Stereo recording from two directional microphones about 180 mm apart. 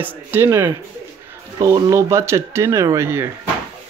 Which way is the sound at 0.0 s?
10° right (ahead or behind).